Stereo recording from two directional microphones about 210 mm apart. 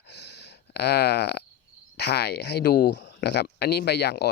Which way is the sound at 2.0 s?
50° left (ahead or behind).